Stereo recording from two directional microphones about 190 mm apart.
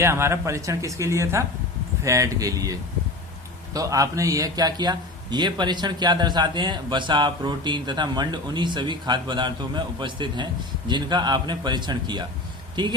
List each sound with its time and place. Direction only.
0.0 s a man's voice: 15° right (ahead or behind)